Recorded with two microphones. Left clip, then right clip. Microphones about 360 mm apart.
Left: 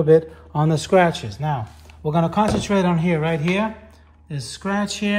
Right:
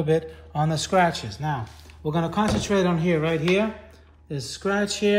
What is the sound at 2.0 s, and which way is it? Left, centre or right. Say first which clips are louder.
Speech: left 5 dB; centre.